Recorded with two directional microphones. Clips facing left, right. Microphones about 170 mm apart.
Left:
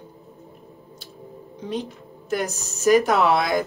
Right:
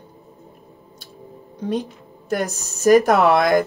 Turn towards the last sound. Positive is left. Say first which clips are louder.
# right 4 dB
turn(degrees=-50)  # may be behind; listen again after turning